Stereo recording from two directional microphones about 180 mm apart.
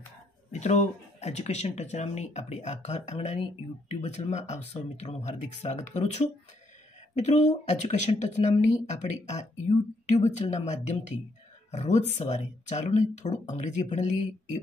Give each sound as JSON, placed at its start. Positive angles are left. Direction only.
{"t": 0.5, "sound": "speech", "side_deg": 40}